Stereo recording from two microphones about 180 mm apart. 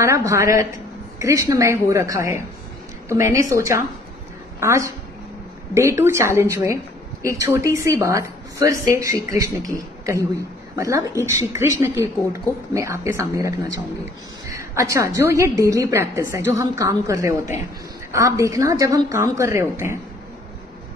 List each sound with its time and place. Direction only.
0.0 s a woman's voice: 15° right (ahead or behind)